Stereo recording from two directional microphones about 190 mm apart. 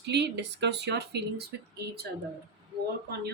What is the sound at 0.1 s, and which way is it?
A woman's voice, 65° right (ahead or behind).